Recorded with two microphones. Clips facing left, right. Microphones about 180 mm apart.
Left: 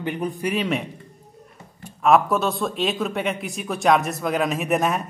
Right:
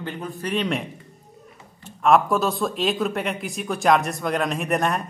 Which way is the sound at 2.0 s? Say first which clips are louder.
Even; centre (ahead or behind).